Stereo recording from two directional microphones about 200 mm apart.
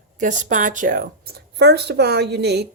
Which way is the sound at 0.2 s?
40° right (ahead or behind).